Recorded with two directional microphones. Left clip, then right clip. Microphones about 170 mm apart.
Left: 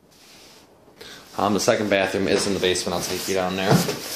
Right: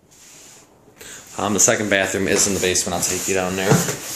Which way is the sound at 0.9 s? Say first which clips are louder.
Left 1 dB; centre (ahead or behind).